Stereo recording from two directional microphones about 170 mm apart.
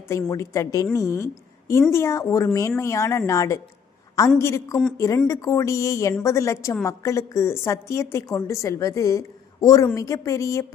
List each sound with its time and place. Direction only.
0.1 s a woman's voice: 20° left (ahead or behind)